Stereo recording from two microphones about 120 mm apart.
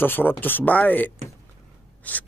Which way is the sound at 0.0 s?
15° left (ahead or behind).